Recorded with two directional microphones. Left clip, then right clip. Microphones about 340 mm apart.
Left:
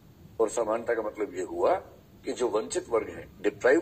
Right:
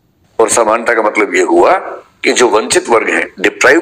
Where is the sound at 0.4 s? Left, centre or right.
Right.